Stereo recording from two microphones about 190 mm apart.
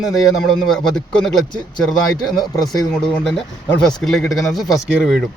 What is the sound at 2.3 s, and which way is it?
Speech, 20° left (ahead or behind).